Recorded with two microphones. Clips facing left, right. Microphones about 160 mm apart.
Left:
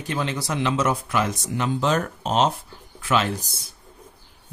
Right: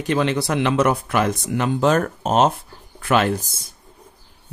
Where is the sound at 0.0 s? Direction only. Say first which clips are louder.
Right 7 dB; 70° right (ahead or behind).